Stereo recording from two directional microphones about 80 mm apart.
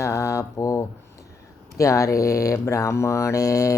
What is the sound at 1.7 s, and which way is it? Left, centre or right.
Speech, left.